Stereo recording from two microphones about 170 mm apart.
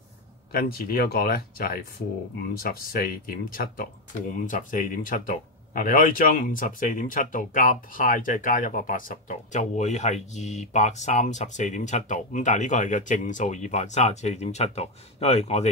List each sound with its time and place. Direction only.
0.5 s speech: 65° left (ahead or behind); by 15.7 s 40° left (ahead or behind)